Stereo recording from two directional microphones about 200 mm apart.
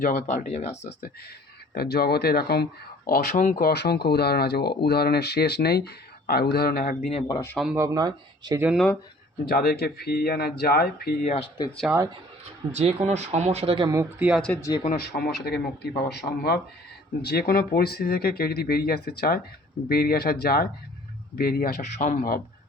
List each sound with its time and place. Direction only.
0.0 s speech: 45° left (ahead or behind)
1.7 s speech: 50° left (ahead or behind)
3.6 s speech: 55° left (ahead or behind)
7.1 s speech: 20° left (ahead or behind)
7.5 s speech: centre (ahead or behind)
7.8 s speech: 20° right (ahead or behind)
8.6 s speech: centre (ahead or behind)
9.5 s speech: 50° left (ahead or behind)
11.9 s speech: 5° right (ahead or behind)
12.7 s speech: 35° right (ahead or behind); by 14.6 s centre (ahead or behind)
14.6 s speech: 20° left (ahead or behind)
14.8 s speech: 50° left (ahead or behind)